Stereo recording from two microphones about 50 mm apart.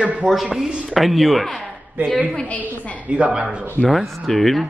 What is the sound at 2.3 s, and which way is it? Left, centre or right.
Speech, left.